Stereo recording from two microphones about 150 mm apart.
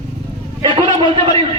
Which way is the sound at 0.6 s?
35° right (ahead or behind).